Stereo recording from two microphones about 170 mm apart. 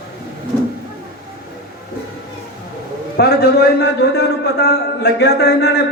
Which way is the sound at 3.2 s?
75° left (ahead or behind).